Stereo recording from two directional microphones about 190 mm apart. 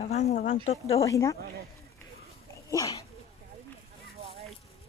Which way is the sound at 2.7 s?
15° left (ahead or behind).